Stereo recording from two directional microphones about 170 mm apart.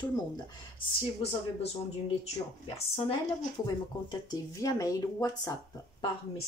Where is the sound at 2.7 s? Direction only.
35° left (ahead or behind).